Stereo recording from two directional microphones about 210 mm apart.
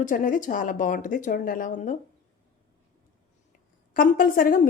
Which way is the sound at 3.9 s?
40° left (ahead or behind).